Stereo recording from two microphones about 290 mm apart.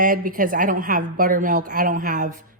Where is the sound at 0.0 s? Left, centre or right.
Right.